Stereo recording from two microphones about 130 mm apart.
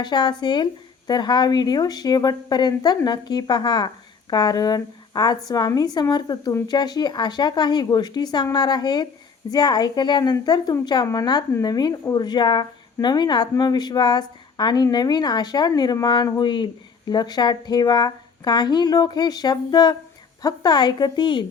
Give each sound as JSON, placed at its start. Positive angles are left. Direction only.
{"t": 0.0, "sound": "speech", "side_deg": 35}